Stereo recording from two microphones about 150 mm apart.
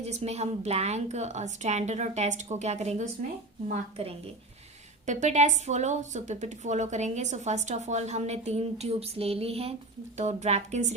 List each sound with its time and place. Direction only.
0.0 s a woman's voice: 45° right (ahead or behind)